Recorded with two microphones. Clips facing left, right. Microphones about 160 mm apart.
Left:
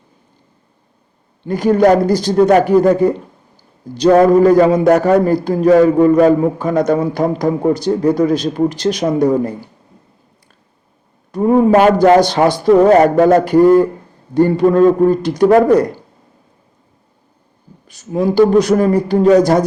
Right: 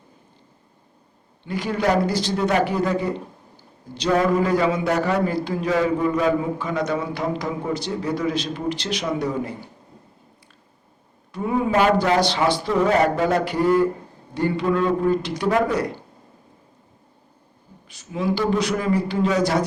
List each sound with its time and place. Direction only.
1.5 s a man's voice: 45° left (ahead or behind)
11.3 s a man's voice: 45° left (ahead or behind)
17.8 s a man's voice: 45° left (ahead or behind)